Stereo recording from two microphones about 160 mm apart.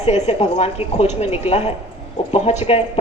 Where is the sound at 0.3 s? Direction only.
40° left (ahead or behind).